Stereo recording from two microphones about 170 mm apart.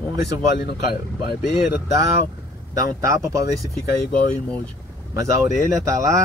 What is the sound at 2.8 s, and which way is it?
Speech, 20° right (ahead or behind).